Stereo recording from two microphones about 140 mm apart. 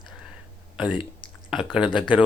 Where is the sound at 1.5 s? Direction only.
5° right (ahead or behind).